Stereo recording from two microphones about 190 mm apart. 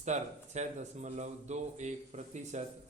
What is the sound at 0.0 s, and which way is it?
Mantra, 40° right (ahead or behind).